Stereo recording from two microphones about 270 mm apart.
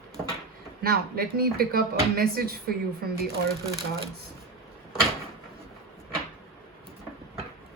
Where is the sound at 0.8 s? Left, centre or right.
Right.